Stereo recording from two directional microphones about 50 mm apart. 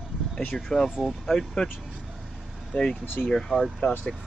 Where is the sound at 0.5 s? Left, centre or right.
Centre.